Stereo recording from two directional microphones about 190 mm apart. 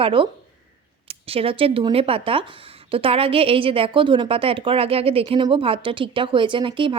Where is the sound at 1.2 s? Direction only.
30° right (ahead or behind).